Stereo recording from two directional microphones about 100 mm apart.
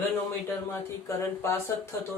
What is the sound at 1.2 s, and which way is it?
Speech, 25° left (ahead or behind).